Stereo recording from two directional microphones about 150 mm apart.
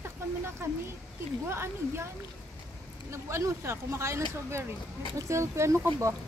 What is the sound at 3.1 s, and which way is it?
Speech, 20° right (ahead or behind).